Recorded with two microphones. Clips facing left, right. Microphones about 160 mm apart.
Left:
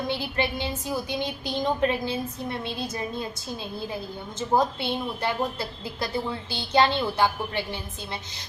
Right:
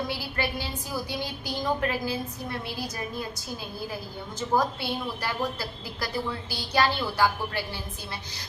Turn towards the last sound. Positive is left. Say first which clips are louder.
# left 1 dB
turn(degrees=25)  # may be behind; listen again after turning